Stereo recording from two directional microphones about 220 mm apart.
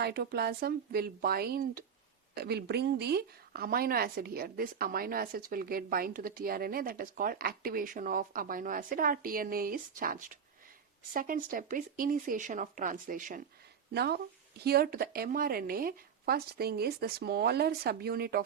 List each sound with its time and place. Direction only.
0.0 s speech: 45° right (ahead or behind)